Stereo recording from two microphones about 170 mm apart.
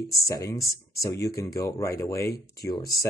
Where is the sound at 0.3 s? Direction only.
20° left (ahead or behind).